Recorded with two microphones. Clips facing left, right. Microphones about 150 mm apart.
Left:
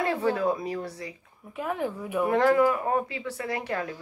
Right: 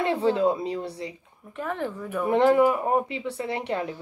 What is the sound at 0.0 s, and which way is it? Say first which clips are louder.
Speech: right 3 dB; 25° right (ahead or behind).